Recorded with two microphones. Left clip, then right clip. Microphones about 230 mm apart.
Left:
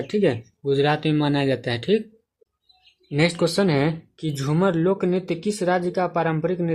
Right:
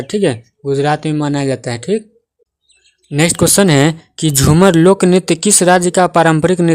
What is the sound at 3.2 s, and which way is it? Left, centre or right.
Speech, right.